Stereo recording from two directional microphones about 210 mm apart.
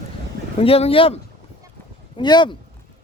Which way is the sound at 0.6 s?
25° left (ahead or behind).